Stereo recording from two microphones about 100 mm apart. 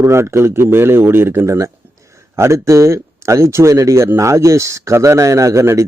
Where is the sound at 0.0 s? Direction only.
25° right (ahead or behind).